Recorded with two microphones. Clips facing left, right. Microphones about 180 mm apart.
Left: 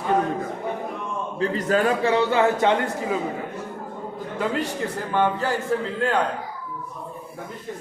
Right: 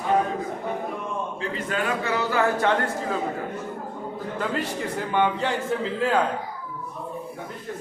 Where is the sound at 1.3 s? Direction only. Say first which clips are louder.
Left 10 dB; 40° left (ahead or behind); by 3.1 s 20° left (ahead or behind).